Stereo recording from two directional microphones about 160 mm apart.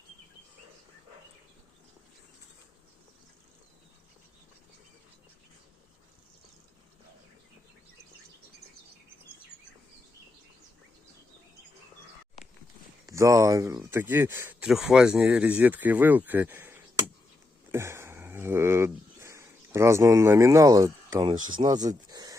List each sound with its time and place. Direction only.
13.1 s speech: 20° right (ahead or behind)
14.7 s speech: 5° right (ahead or behind)
17.7 s a sound: 15° right (ahead or behind)